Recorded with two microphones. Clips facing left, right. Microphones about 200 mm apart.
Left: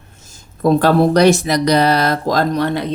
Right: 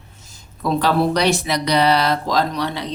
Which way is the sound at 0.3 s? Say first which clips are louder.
Left 8 dB; 50° left (ahead or behind).